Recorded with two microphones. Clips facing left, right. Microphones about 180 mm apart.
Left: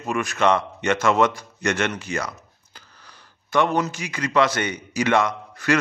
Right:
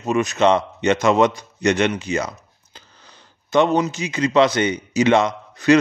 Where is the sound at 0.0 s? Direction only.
20° right (ahead or behind).